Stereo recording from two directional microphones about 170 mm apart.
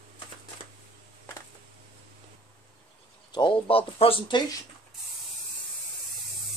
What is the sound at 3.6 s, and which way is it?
Speech, 35° left (ahead or behind).